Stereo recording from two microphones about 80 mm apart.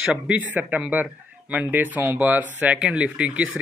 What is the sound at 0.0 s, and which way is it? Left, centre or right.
Speech, centre.